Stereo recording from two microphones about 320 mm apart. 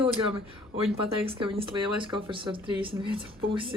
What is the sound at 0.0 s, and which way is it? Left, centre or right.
Speech, centre.